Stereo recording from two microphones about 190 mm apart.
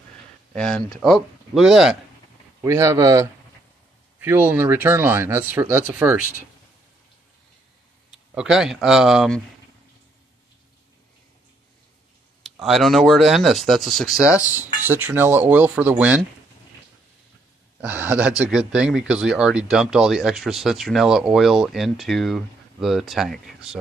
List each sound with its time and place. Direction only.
0.6 s speech: 5° left (ahead or behind)
2.6 s speech: 15° right (ahead or behind)
8.1 s speech: 5° right (ahead or behind)
12.4 s speech: centre (ahead or behind)
17.7 s speech: 10° right (ahead or behind)